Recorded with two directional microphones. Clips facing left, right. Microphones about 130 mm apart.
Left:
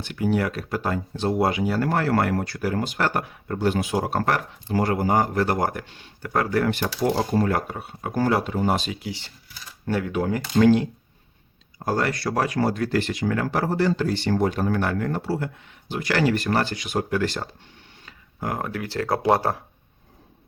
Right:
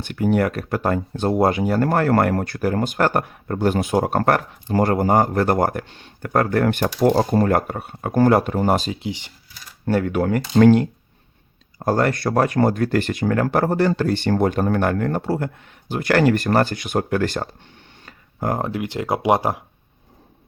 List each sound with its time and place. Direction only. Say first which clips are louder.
0.0 s speech: right 4 dB; 55° right (ahead or behind)
8.9 s speech: right 4 dB; 25° right (ahead or behind)
9.8 s speech: right 5 dB; 50° right (ahead or behind)
18.0 s a sound: right 6 dB; 50° right (ahead or behind)
18.5 s speech: right 2 dB; 25° right (ahead or behind)